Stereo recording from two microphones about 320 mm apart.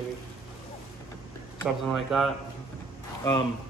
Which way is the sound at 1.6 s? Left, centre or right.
Centre.